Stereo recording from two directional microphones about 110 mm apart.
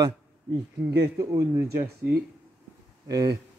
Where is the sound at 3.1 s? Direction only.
35° right (ahead or behind).